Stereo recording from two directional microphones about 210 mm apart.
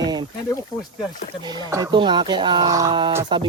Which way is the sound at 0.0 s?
20° right (ahead or behind).